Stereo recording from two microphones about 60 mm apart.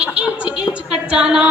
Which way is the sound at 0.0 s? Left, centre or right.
Centre.